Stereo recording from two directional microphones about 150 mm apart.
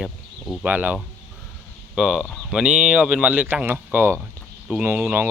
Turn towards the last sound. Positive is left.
turn(degrees=-10)  # may be behind; listen again after turning